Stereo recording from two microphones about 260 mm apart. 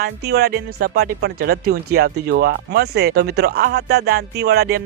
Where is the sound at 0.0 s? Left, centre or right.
Right.